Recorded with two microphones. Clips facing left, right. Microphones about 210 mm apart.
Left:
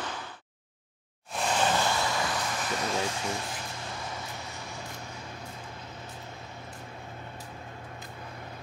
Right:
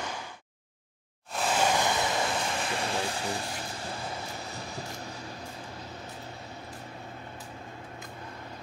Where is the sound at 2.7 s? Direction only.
30° right (ahead or behind).